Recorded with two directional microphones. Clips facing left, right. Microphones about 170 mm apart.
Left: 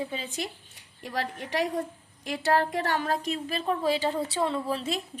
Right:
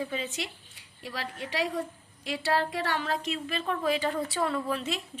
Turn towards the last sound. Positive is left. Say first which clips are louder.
# left 1 dB
turn(degrees=30)  # may be behind; listen again after turning